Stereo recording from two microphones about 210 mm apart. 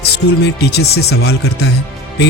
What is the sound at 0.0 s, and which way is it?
Speech, 50° left (ahead or behind).